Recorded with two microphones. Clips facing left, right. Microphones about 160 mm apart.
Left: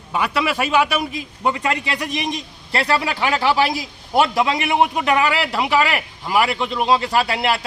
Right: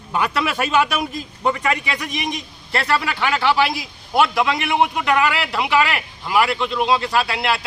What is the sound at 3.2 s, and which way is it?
Speech, 35° left (ahead or behind).